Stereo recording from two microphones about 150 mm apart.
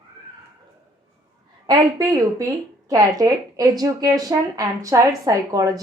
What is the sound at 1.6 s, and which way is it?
Speech, 25° right (ahead or behind).